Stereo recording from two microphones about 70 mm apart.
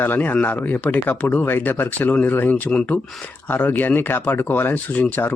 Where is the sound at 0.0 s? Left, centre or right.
Left.